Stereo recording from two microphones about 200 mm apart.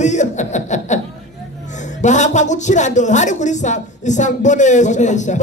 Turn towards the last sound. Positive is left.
turn(degrees=35)  # may be behind; listen again after turning